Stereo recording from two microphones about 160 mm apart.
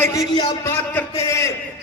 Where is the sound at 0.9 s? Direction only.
20° left (ahead or behind).